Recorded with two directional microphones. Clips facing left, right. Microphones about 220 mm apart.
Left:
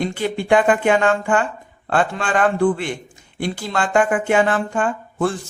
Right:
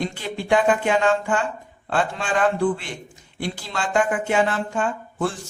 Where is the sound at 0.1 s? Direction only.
55° left (ahead or behind).